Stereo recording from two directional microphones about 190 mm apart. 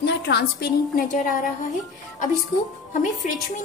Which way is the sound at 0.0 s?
60° left (ahead or behind).